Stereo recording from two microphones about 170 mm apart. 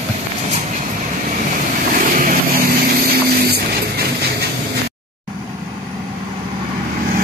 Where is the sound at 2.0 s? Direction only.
50° right (ahead or behind).